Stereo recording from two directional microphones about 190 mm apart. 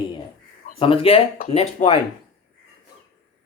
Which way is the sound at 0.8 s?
30° left (ahead or behind).